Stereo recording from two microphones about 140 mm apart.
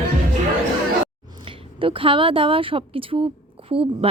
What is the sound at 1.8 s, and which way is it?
Speech, 40° right (ahead or behind).